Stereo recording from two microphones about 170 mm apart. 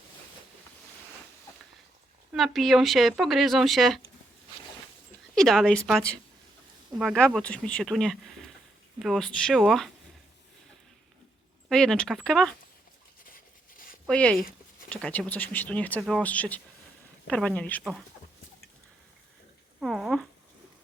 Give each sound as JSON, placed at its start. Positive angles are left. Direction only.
{"t": 2.3, "sound": "speech", "side_deg": 0}
{"t": 5.3, "sound": "speech", "side_deg": 0}
{"t": 11.7, "sound": "speech", "side_deg": 5}
{"t": 13.2, "sound": "writing", "side_deg": 55}
{"t": 14.1, "sound": "speech", "side_deg": 5}
{"t": 19.8, "sound": "a sound", "side_deg": 0}